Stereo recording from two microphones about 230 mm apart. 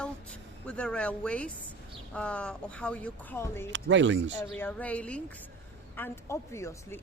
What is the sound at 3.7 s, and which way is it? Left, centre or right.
Speech, right.